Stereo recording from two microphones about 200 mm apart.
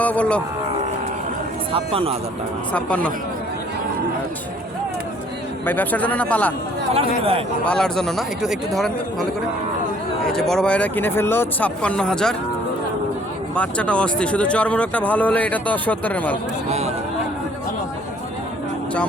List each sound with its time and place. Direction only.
0.0 s speech: 5° left (ahead or behind)
1.7 s speech: 30° right (ahead or behind)
2.7 s speech: 5° left (ahead or behind)
5.6 s speech: 10° left (ahead or behind)
7.6 s speech: 5° left (ahead or behind)
10.2 s speech: centre (ahead or behind)
13.6 s speech: 5° left (ahead or behind)
16.6 s a sound: 35° right (ahead or behind)